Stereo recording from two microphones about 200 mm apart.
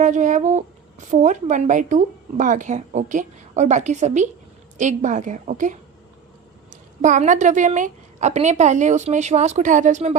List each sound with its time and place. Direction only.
0.0 s speech: 40° right (ahead or behind)
7.0 s speech: 40° right (ahead or behind)